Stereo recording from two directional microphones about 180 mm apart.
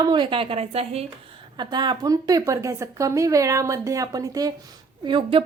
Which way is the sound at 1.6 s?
25° right (ahead or behind).